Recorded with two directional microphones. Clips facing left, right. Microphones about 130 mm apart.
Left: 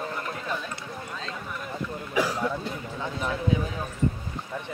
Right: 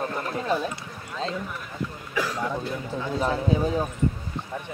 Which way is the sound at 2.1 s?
15° left (ahead or behind).